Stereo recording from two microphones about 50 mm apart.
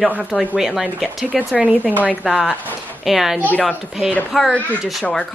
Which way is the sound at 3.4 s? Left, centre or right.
Left.